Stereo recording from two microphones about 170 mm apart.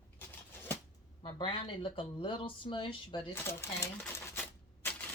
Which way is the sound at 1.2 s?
30° left (ahead or behind).